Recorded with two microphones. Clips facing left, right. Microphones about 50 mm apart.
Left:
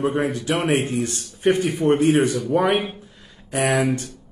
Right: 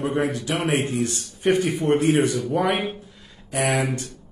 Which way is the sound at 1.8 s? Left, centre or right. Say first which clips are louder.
Left 5 dB; left.